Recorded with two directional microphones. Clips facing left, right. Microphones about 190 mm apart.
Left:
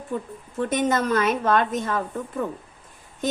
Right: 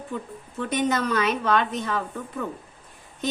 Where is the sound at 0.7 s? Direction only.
45° left (ahead or behind).